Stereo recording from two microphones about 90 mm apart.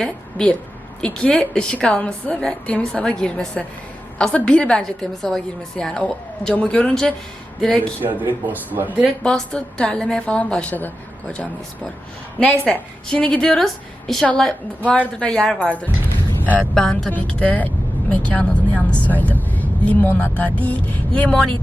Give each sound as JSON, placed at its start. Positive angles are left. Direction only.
{"t": 0.0, "sound": "speech", "side_deg": 10}
{"t": 8.0, "sound": "speech", "side_deg": -20}
{"t": 9.2, "sound": "speech", "side_deg": 10}
{"t": 14.8, "sound": "speech", "side_deg": 15}
{"t": 16.6, "sound": "speech", "side_deg": 10}
{"t": 17.1, "sound": "speech", "side_deg": 15}